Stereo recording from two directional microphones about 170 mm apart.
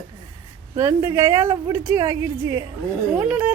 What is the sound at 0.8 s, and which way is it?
A woman's voice, 15° right (ahead or behind).